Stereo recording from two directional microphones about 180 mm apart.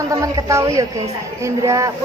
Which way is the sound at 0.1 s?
20° right (ahead or behind).